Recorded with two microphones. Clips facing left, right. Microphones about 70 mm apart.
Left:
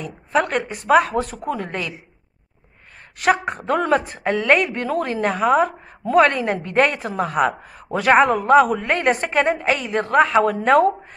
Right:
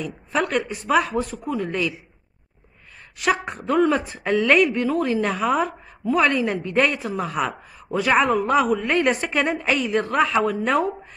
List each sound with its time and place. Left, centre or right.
0.0 s a woman's voice: left
3.2 s a woman's voice: left
6.0 s a woman's voice: left